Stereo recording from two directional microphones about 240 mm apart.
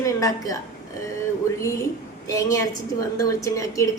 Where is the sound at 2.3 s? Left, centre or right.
Centre.